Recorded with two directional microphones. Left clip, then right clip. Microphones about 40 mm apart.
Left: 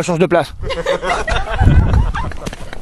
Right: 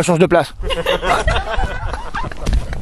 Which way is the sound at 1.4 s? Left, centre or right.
Centre.